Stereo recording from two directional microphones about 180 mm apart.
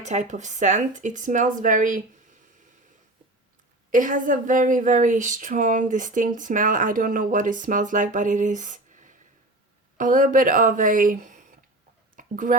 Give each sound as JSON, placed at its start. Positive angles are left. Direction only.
{"t": 0.0, "sound": "speech", "side_deg": -40}
{"t": 3.9, "sound": "speech", "side_deg": -45}
{"t": 12.1, "sound": "a sound", "side_deg": -50}